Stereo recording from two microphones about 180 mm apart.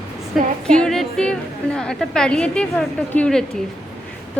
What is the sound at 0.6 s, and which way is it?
A woman's voice, 5° left (ahead or behind).